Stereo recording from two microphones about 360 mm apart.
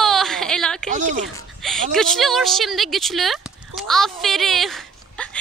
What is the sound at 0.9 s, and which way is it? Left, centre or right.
Speech, right.